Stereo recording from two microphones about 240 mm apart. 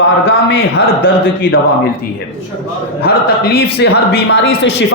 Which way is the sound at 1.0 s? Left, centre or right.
Left.